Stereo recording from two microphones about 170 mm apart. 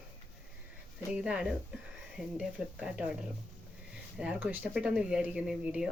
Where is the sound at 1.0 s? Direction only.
5° right (ahead or behind).